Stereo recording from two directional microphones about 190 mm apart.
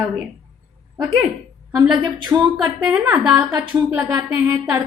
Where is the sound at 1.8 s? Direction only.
20° right (ahead or behind).